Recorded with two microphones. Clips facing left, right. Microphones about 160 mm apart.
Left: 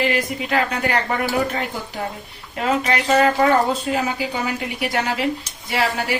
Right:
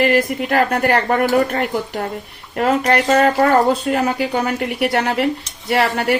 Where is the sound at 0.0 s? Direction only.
55° right (ahead or behind).